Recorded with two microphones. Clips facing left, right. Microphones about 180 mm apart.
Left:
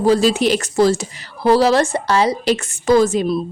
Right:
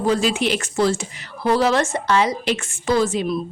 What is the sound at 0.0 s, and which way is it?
A woman's voice, 35° left (ahead or behind).